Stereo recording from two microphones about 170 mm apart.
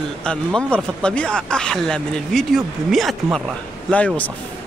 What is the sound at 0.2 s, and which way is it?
Speech, 5° left (ahead or behind).